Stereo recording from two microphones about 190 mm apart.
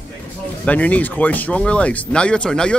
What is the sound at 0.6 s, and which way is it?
Speech, 10° left (ahead or behind).